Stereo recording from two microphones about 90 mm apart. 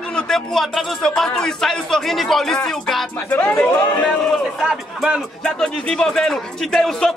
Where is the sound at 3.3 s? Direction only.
20° left (ahead or behind).